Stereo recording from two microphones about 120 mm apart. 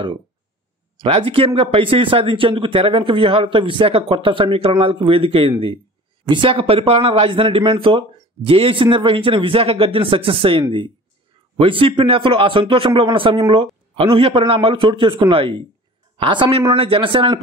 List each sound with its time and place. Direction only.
0.9 s speech: 50° right (ahead or behind)